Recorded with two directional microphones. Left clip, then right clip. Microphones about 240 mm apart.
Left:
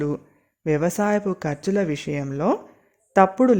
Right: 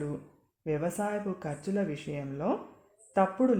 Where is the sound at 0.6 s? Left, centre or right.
Left.